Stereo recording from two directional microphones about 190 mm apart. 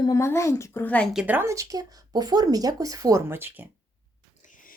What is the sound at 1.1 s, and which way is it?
Speech, 5° right (ahead or behind).